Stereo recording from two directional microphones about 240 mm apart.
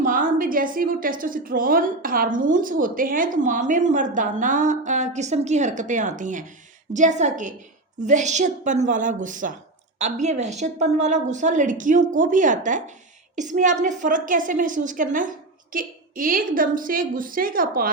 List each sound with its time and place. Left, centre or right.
0.0 s a woman's voice: right